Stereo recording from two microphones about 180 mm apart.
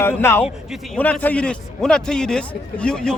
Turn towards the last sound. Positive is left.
turn(degrees=5)  # may be behind; listen again after turning